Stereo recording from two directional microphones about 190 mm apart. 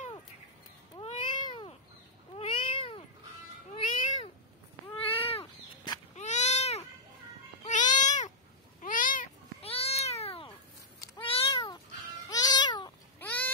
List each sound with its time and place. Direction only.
0.9 s cat: 25° left (ahead or behind)
5.0 s baby cry: 30° left (ahead or behind)
7.6 s babbling: 40° left (ahead or behind)
8.8 s cat: 45° left (ahead or behind)
9.6 s cat: 30° left (ahead or behind)
12.3 s music: 20° left (ahead or behind)
13.2 s a sound: 10° left (ahead or behind)